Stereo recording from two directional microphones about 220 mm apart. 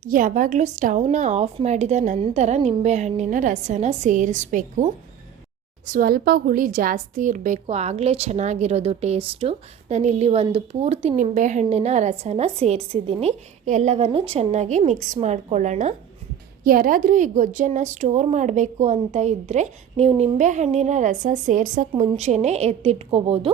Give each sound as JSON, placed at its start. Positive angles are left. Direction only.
{"t": 0.0, "sound": "a woman's voice", "side_deg": -35}